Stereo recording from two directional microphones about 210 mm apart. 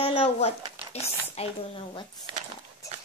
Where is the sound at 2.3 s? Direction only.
25° right (ahead or behind).